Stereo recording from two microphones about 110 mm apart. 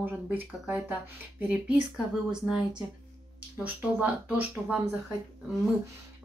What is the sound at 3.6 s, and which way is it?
Speech, 15° right (ahead or behind).